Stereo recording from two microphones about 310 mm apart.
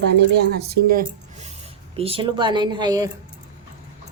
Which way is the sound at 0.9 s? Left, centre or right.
Right.